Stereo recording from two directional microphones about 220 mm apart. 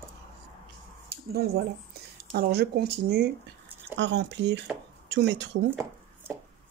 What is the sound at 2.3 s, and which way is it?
Speech, 50° right (ahead or behind).